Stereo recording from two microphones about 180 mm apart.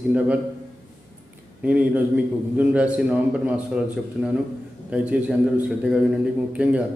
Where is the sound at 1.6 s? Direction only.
5° right (ahead or behind).